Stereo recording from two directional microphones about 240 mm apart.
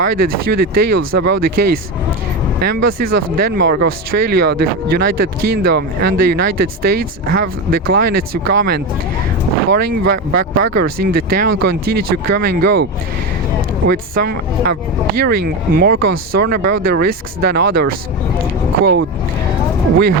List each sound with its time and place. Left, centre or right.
0.0 s speech: right
13.8 s speech: right